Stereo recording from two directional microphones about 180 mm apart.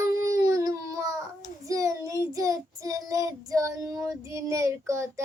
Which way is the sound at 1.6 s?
20° right (ahead or behind).